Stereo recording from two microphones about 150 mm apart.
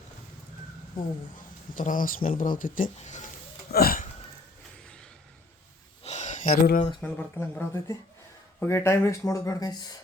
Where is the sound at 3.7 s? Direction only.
80° left.